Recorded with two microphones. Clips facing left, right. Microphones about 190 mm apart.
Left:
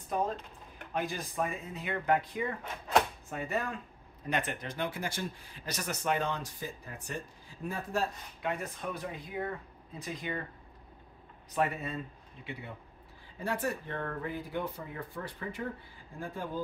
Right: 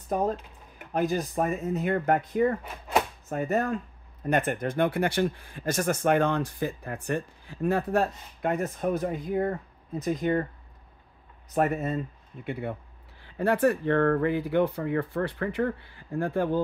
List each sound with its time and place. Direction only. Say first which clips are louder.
0.9 s speech: right 8 dB; 45° right (ahead or behind)
11.5 s speech: right 7 dB; 45° right (ahead or behind)
12.4 s speech: right 11 dB; 55° right (ahead or behind)